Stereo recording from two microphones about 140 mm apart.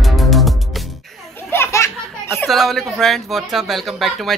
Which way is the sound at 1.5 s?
20° left (ahead or behind).